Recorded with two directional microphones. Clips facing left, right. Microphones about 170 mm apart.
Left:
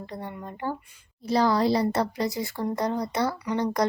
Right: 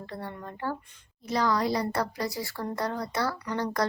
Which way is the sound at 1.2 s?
30° left (ahead or behind).